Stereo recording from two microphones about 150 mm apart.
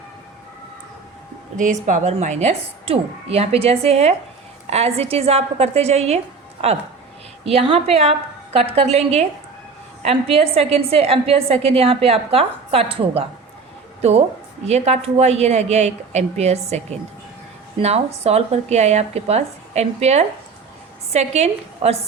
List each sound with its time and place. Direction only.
1.5 s a woman's voice: 55° right (ahead or behind)